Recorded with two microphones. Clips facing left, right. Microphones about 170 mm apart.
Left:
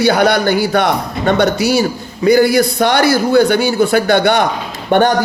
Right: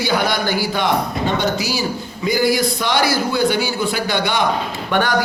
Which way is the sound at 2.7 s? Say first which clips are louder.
Left 6 dB; 50° left (ahead or behind).